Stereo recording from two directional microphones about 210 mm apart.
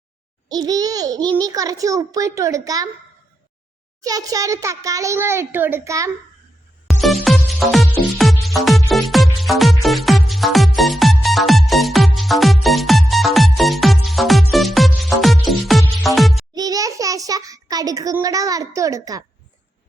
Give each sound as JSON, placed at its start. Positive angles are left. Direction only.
{"t": 0.4, "sound": "a child's voice", "side_deg": -20}
{"t": 4.0, "sound": "a child's voice", "side_deg": -15}
{"t": 7.0, "sound": "music", "side_deg": 0}
{"t": 16.6, "sound": "a sound", "side_deg": -15}